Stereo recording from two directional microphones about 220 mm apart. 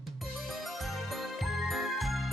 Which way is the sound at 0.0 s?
Centre (ahead or behind).